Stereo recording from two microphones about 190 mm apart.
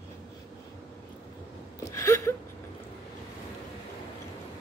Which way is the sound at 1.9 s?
15° left (ahead or behind).